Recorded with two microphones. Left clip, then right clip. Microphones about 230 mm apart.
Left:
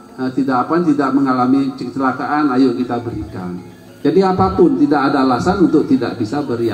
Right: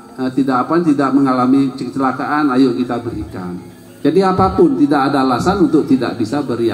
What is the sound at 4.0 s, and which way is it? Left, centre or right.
A man's voice, right.